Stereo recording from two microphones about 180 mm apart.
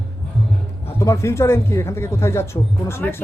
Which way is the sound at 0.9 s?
15° left (ahead or behind).